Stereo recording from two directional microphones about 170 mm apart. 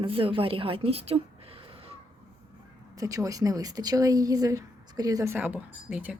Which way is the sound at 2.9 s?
20° right (ahead or behind).